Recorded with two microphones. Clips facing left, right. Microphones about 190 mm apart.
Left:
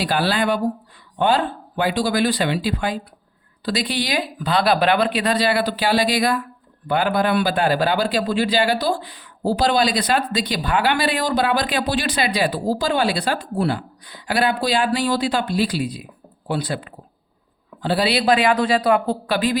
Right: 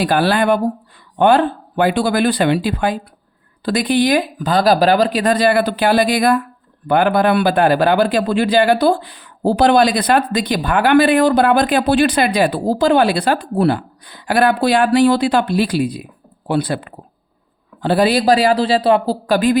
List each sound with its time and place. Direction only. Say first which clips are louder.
0.0 s speech: right 5 dB; 50° right (ahead or behind); by 19.1 s 30° right (ahead or behind)
19.3 s speech: right 7 dB; 50° right (ahead or behind)